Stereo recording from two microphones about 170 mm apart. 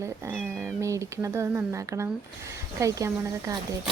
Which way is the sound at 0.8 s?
15° right (ahead or behind).